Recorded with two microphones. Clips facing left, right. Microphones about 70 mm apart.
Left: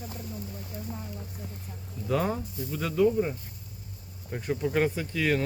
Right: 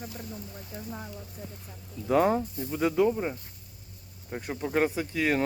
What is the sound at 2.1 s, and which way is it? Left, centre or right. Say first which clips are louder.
Speech: right 5 dB; right.